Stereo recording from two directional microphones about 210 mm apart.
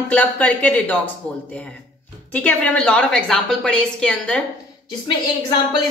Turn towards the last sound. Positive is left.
turn(degrees=20)  # may be behind; listen again after turning